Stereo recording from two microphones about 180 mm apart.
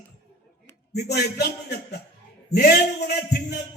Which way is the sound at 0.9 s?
65° left (ahead or behind).